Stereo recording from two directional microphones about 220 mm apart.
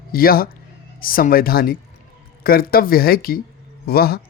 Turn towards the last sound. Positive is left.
turn(degrees=45)  # may be behind; listen again after turning